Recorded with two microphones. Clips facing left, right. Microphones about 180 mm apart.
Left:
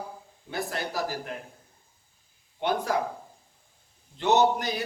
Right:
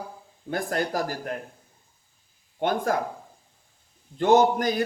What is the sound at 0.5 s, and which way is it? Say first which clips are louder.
Speech: right 5 dB; 50° right (ahead or behind).